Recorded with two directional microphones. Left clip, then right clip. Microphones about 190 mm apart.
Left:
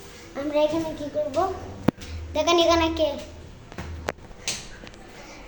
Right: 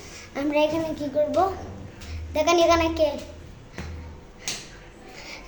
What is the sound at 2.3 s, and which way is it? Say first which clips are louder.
Speech: right 1 dB; 10° right (ahead or behind).